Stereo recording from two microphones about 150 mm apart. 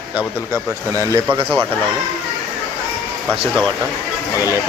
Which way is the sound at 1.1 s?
30° right (ahead or behind).